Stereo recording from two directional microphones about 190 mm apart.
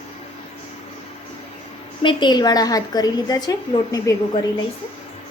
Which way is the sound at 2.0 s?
25° left (ahead or behind).